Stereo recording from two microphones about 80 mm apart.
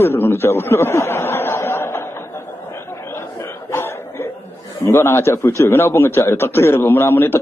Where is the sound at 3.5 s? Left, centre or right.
Left.